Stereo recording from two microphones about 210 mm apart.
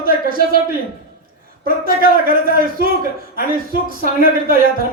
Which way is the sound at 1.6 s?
45° right (ahead or behind).